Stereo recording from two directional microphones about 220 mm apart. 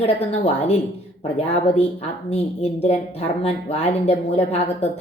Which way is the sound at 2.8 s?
30° left (ahead or behind).